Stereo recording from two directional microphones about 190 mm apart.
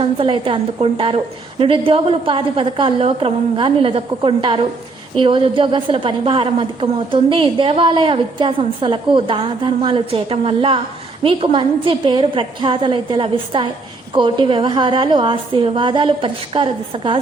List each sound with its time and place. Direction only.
0.0 s a woman's voice: 30° right (ahead or behind)